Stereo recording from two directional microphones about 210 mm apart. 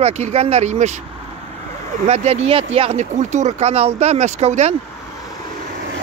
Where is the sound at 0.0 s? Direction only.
30° right (ahead or behind).